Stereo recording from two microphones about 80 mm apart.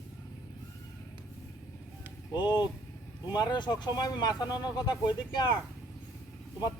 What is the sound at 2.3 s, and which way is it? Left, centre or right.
Speech, left.